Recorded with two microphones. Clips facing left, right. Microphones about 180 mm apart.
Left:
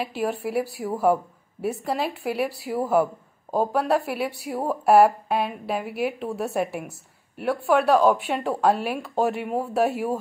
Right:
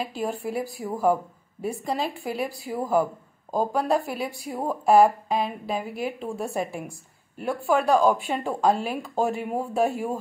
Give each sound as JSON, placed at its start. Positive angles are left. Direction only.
{"t": 0.0, "sound": "a woman's voice", "side_deg": 5}